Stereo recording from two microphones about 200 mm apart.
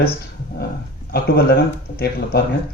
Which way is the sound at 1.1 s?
50° left (ahead or behind).